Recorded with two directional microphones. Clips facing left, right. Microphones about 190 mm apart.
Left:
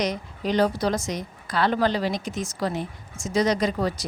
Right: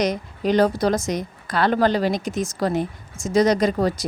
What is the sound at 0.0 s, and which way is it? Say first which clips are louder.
A woman's voice: right 4 dB; 45° right (ahead or behind).